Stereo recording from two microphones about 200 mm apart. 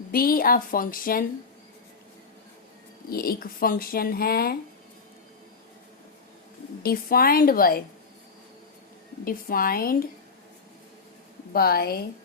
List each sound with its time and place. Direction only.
0.1 s speech: 45° left (ahead or behind)
3.1 s speech: 45° left (ahead or behind)
6.8 s speech: 50° left (ahead or behind)
9.2 s speech: 45° left (ahead or behind)
11.5 s speech: 50° left (ahead or behind)